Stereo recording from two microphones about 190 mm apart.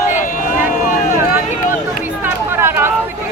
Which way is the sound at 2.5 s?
10° right (ahead or behind).